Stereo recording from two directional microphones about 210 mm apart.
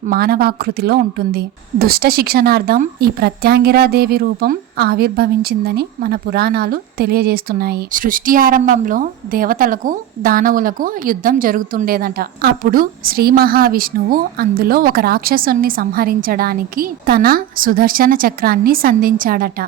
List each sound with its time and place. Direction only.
0.1 s a woman's voice: 45° right (ahead or behind)